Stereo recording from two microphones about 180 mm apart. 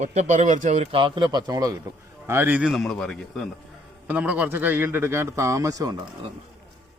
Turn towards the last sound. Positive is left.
turn(degrees=-20)  # may be behind; listen again after turning